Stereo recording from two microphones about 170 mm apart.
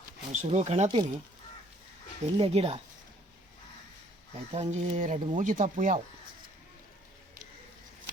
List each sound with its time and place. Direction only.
0.3 s speech: 40° right (ahead or behind)
2.4 s speech: 35° right (ahead or behind)
4.5 s speech: 40° right (ahead or behind)